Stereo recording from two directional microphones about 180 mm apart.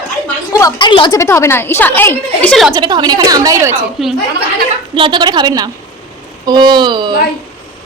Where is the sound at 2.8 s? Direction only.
25° right (ahead or behind).